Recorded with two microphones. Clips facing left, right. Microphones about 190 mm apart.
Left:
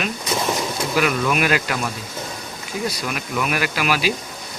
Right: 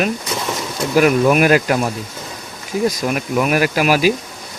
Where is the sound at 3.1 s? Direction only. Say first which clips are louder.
Right 7 dB; 45° right (ahead or behind).